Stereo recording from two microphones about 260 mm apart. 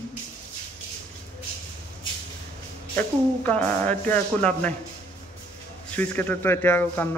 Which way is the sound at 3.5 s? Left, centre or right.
Centre.